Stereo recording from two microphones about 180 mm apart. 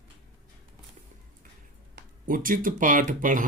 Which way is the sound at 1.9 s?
50° right (ahead or behind).